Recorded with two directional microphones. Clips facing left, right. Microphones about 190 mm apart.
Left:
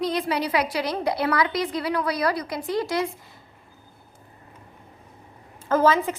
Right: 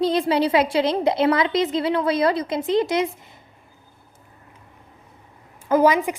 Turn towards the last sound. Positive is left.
turn(degrees=-15)  # may be behind; listen again after turning